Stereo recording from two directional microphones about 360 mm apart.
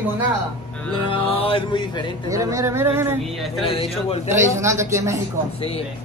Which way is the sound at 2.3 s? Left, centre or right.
Centre.